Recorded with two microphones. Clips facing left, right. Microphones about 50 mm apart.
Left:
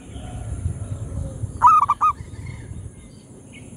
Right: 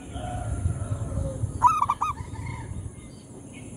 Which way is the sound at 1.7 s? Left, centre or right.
Centre.